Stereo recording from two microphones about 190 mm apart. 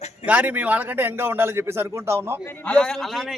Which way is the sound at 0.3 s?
10° right (ahead or behind).